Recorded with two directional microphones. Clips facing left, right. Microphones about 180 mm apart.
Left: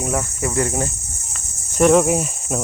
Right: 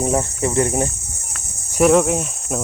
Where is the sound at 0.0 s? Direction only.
25° right (ahead or behind).